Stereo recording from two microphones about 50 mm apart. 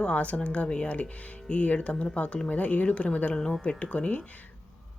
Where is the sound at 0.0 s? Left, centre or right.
Left.